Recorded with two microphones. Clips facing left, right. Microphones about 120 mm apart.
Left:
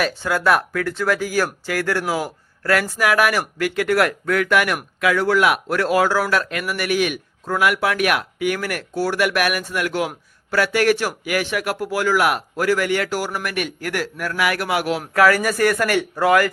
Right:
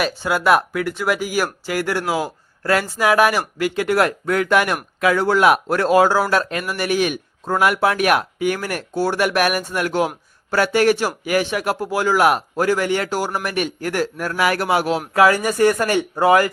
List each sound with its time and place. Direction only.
0.0 s speech: 15° right (ahead or behind)